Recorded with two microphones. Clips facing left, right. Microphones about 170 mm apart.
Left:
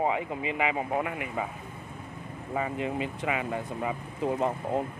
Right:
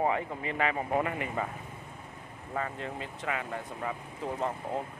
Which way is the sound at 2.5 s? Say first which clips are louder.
Left 5 dB; 15° left (ahead or behind).